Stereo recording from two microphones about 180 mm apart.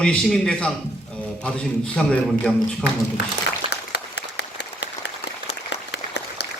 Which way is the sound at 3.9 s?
70° left (ahead or behind).